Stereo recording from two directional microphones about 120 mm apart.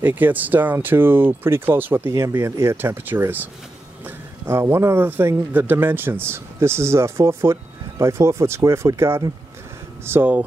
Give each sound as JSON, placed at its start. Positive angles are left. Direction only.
{"t": 0.0, "sound": "a man's voice", "side_deg": -15}